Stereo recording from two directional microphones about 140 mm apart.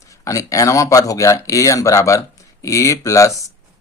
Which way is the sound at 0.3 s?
25° left (ahead or behind).